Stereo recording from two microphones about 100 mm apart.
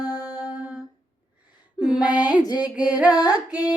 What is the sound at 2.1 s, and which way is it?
Female singing, 45° left (ahead or behind).